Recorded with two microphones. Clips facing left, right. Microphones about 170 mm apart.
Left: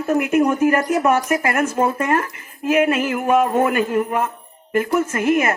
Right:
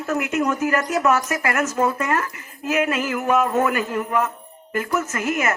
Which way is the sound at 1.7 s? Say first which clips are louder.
Left 3 dB; 30° left (ahead or behind).